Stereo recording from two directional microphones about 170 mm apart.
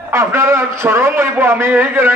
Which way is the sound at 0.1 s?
15° right (ahead or behind).